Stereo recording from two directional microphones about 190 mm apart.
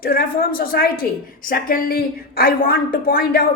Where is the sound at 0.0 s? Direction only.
50° left (ahead or behind).